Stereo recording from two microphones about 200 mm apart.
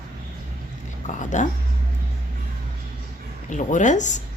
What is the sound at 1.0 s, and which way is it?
Speech, 40° left (ahead or behind).